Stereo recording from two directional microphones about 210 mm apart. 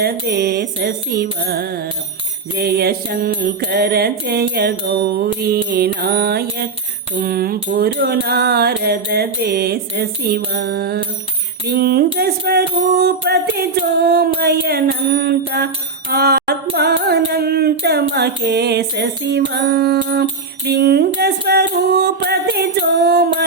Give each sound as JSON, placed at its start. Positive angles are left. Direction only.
{"t": 0.0, "sound": "music", "side_deg": -50}